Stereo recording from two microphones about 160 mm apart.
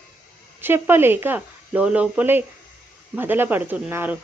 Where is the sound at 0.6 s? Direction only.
15° right (ahead or behind).